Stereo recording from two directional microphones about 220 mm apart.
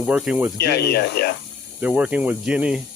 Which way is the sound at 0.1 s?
5° right (ahead or behind).